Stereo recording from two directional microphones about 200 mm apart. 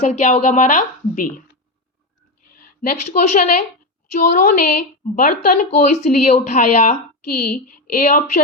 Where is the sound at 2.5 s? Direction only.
45° left (ahead or behind).